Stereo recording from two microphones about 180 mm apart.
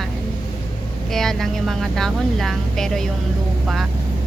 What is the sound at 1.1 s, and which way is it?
Speech, centre (ahead or behind).